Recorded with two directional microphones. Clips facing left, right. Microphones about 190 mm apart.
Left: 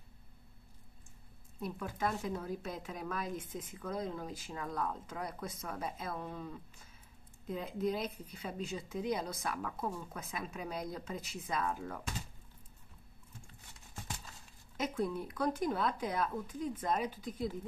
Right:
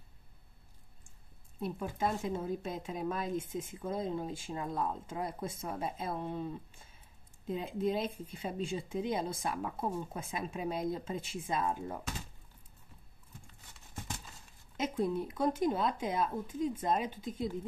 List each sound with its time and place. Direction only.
1.6 s speech: 25° right (ahead or behind)
14.8 s speech: 20° right (ahead or behind)